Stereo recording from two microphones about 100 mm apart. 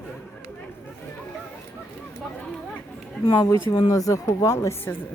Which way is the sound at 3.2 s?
35° left (ahead or behind).